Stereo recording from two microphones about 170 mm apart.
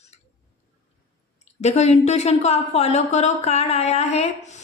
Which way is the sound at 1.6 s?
40° left (ahead or behind).